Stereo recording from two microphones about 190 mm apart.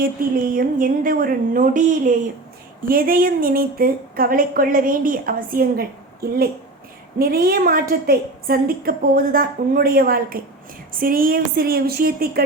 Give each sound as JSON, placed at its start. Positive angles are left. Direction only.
{"t": 0.5, "sound": "speech", "side_deg": -45}